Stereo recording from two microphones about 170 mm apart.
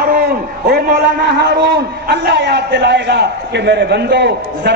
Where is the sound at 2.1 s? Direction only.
90° right.